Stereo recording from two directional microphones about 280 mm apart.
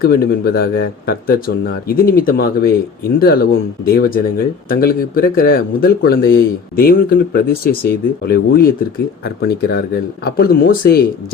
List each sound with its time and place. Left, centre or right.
0.0 s speech: left